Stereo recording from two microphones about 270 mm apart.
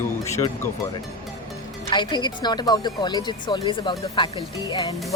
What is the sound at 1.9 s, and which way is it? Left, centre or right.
A woman's voice, centre.